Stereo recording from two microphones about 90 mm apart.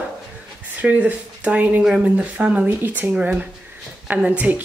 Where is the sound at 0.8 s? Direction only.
15° right (ahead or behind).